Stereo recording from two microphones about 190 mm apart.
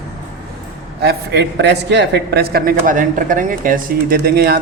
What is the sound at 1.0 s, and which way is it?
A man's voice, 60° right (ahead or behind).